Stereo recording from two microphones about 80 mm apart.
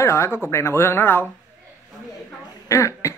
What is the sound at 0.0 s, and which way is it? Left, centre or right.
Speech, left.